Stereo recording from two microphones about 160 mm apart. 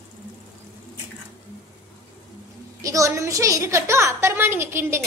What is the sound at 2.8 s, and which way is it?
A woman's voice, 20° right (ahead or behind).